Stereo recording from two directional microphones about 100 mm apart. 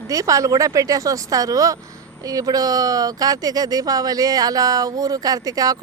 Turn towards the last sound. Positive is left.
turn(degrees=-40)  # may be behind; listen again after turning